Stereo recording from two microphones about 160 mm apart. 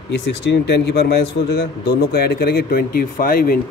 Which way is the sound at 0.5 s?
90° left.